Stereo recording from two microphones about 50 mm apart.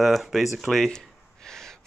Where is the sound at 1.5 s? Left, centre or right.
Centre.